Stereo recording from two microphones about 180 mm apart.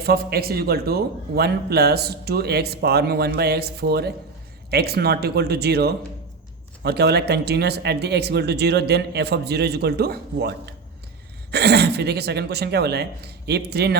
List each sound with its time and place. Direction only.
0.0 s a man's voice: 60° right (ahead or behind)